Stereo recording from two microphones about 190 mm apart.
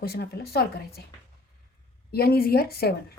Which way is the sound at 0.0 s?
55° left (ahead or behind).